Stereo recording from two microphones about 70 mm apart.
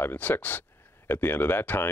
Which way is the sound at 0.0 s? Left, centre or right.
Left.